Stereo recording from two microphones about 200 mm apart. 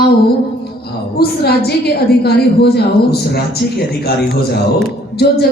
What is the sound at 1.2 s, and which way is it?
A woman's voice, 55° left (ahead or behind).